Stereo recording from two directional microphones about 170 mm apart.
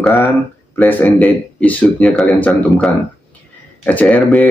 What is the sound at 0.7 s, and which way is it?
Speech, 10° left (ahead or behind).